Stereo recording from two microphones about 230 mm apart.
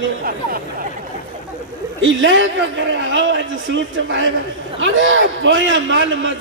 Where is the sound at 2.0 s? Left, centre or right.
Right.